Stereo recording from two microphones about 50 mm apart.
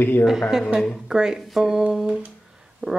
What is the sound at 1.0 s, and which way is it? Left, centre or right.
Speech, centre.